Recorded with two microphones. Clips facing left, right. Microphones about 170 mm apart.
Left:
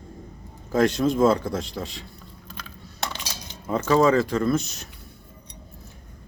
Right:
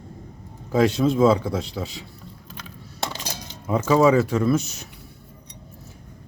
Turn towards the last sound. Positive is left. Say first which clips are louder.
# right 2 dB
turn(degrees=-10)  # may be behind; listen again after turning